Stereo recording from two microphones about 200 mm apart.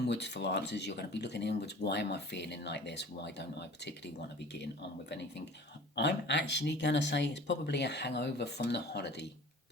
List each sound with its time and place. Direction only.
0.0 s speech: 60° left (ahead or behind)
6.0 s speech: 60° left (ahead or behind)